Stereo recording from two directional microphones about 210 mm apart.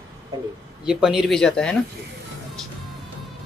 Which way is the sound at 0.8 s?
Centre (ahead or behind).